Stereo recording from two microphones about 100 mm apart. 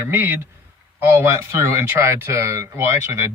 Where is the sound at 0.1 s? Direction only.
20° right (ahead or behind).